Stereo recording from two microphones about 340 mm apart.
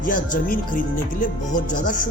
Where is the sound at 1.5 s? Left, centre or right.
Left.